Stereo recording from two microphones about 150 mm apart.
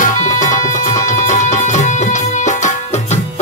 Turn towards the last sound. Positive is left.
turn(degrees=50)  # may be behind; listen again after turning